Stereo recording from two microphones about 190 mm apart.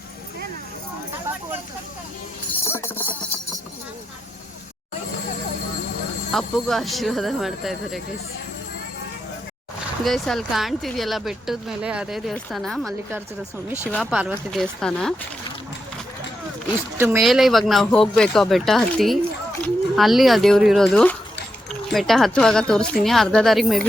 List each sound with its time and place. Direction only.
2.6 s music: 10° left (ahead or behind)
6.3 s speech: centre (ahead or behind)
10.0 s speech: centre (ahead or behind)
13.9 s speech: 5° right (ahead or behind)
17.0 s speech: 5° right (ahead or behind)